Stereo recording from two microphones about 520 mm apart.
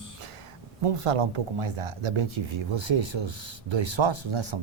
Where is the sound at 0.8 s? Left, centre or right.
Right.